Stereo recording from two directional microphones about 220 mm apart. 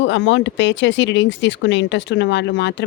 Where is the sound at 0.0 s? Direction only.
55° left (ahead or behind).